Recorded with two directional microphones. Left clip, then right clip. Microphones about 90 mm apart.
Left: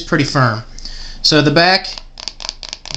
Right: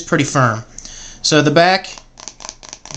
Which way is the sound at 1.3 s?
20° right (ahead or behind).